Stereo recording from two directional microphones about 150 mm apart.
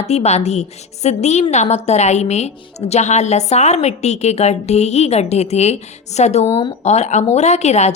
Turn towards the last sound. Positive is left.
turn(degrees=50)  # may be behind; listen again after turning